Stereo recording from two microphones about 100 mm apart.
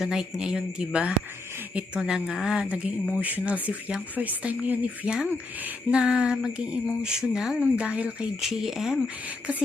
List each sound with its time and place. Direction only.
0.0 s speech: 5° right (ahead or behind)